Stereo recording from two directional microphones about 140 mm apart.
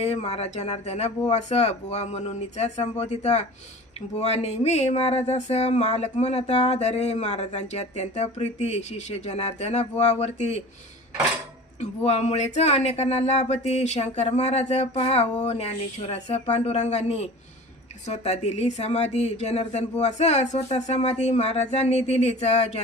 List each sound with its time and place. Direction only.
0.0 s speech: 50° left (ahead or behind)
11.8 s speech: 55° left (ahead or behind)